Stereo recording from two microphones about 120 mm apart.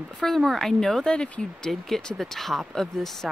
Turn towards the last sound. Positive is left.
turn(degrees=5)  # may be behind; listen again after turning